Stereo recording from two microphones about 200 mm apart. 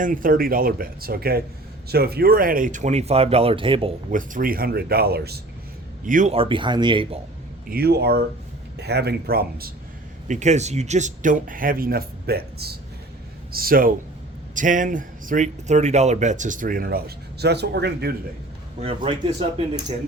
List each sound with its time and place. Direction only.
0.0 s speech: 45° right (ahead or behind); by 3.9 s 25° right (ahead or behind)
4.1 s speech: 40° right (ahead or behind)
6.1 s speech: 40° right (ahead or behind)
6.3 s speech: 25° right (ahead or behind)
7.7 s speech: 50° right (ahead or behind)
10.2 s speech: 35° right (ahead or behind); by 18.1 s 55° right (ahead or behind)
18.8 s speech: 25° right (ahead or behind)